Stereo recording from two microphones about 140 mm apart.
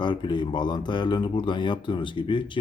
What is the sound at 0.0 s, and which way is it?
Speech, 35° left (ahead or behind).